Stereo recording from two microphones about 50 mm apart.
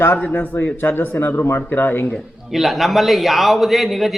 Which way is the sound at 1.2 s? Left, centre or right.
Left.